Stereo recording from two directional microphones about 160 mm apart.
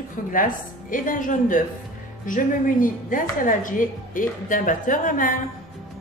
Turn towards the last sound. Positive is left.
turn(degrees=55)  # may be behind; listen again after turning